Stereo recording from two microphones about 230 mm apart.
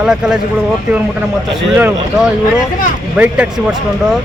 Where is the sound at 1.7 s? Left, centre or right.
Centre.